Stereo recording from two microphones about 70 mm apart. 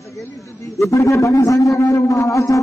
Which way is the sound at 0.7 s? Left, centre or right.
Left.